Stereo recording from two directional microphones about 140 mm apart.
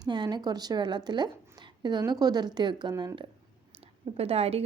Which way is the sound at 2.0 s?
30° right (ahead or behind).